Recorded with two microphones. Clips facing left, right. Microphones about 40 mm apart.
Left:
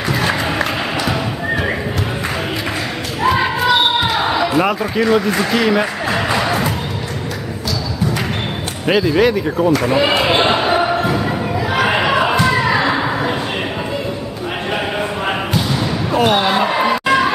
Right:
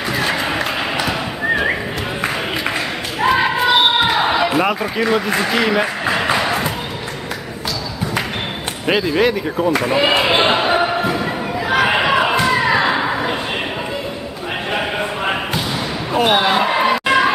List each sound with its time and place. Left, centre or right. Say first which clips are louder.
0.1 s music: left 1 dB; centre
3.2 s a sound: even; centre
8.8 s speech: left 2 dB; centre
9.8 s basketball bounce: left 1 dB; centre
11.7 s slam: right 1 dB; centre
14.7 s basketball bounce: even; centre
16.1 s a sound: even; centre